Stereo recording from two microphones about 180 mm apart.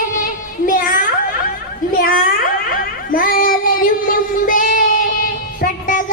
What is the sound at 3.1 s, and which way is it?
Child singing, 50° left (ahead or behind).